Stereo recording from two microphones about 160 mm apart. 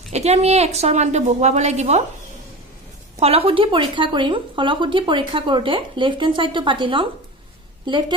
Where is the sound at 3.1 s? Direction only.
40° right (ahead or behind).